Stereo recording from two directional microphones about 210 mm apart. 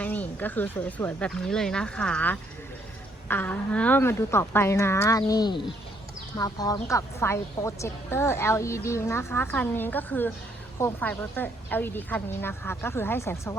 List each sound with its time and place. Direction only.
0.0 s a woman's voice: 10° left (ahead or behind)